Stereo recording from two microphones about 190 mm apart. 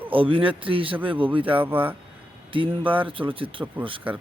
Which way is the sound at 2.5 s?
25° right (ahead or behind).